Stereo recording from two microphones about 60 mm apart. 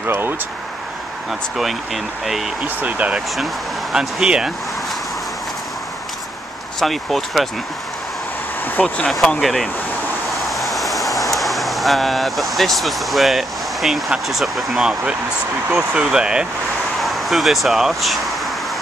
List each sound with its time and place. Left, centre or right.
0.0 s speech: right
2.2 s speech: centre
2.6 s speech: right
3.9 s speech: centre
6.8 s speech: centre
8.8 s speech: centre
9.4 s speech: centre
10.3 s vehicle: centre
11.3 s speech: centre
17.0 s speech: centre